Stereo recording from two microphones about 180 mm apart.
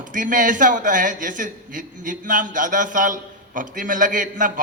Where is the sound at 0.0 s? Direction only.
45° right (ahead or behind).